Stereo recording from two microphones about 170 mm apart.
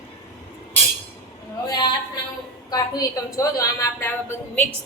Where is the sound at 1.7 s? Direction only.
25° left (ahead or behind).